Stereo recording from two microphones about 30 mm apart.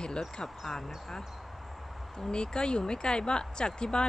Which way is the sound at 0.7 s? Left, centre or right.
Centre.